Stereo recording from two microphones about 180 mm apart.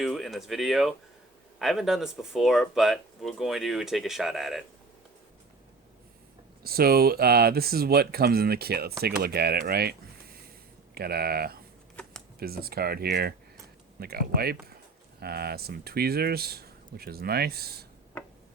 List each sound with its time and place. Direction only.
0.0 s speech: centre (ahead or behind)
6.6 s speech: 60° right (ahead or behind)
10.9 s speech: 60° right (ahead or behind)